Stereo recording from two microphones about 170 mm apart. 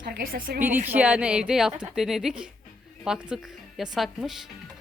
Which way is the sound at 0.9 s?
10° right (ahead or behind).